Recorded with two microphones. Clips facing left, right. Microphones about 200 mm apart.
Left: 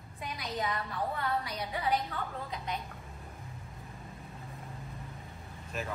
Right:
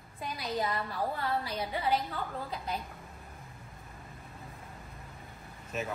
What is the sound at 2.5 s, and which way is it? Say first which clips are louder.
Speech: right 1 dB; 5° right (ahead or behind).